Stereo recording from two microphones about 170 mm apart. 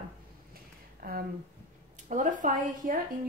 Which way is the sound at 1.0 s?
60° right (ahead or behind).